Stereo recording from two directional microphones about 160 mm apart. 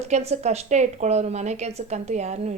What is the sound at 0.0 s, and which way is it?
A woman's voice, 40° right (ahead or behind).